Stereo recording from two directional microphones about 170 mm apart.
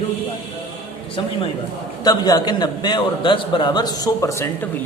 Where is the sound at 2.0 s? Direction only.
20° left (ahead or behind).